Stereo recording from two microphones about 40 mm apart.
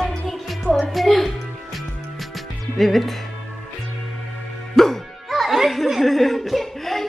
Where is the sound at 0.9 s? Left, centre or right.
Centre.